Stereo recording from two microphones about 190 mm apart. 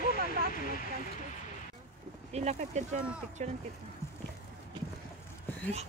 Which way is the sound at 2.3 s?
35° right (ahead or behind).